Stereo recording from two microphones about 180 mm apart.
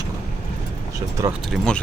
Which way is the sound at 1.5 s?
5° left (ahead or behind).